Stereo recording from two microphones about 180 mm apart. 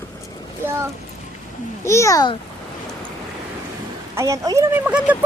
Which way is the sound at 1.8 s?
15° left (ahead or behind).